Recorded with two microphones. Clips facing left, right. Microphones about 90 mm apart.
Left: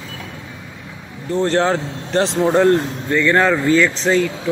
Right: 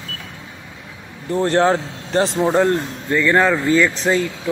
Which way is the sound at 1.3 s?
15° right (ahead or behind).